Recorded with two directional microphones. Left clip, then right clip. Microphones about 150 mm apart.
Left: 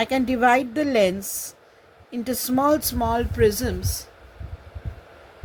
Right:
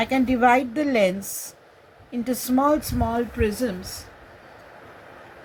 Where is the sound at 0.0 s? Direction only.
70° left (ahead or behind); by 3.7 s 90° left.